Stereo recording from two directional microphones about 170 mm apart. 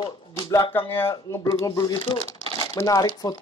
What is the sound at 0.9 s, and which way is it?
Speech, 15° left (ahead or behind).